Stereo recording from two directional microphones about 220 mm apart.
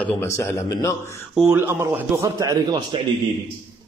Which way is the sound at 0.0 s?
10° left (ahead or behind).